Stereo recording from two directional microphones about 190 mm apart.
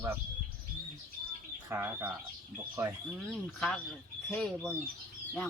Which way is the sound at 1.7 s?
10° right (ahead or behind).